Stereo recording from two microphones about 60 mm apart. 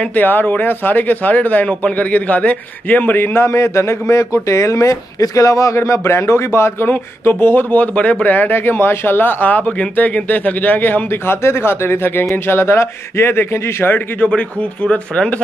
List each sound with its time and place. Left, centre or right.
0.0 s speech: left
3.3 s speech: left
6.9 s speech: left
7.7 s speech: left
13.9 s speech: left